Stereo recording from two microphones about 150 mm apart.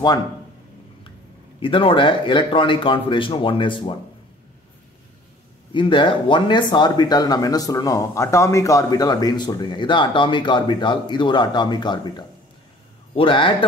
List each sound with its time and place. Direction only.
1.6 s speech: 35° left (ahead or behind)
5.7 s speech: 30° left (ahead or behind)